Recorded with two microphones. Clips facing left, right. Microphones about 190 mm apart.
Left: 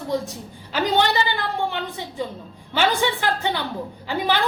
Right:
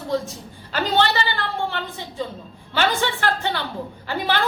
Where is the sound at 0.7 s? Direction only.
15° left (ahead or behind).